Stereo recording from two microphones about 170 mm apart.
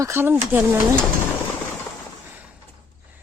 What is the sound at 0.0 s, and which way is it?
Speech, 15° right (ahead or behind).